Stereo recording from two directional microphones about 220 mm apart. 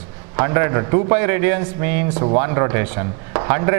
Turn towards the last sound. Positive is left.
turn(degrees=-15)  # may be behind; listen again after turning